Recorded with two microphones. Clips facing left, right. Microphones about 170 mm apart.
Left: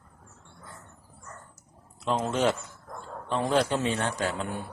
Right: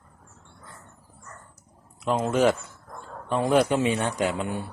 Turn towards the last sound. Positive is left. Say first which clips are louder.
# right 3 dB
turn(degrees=-15)  # may be behind; listen again after turning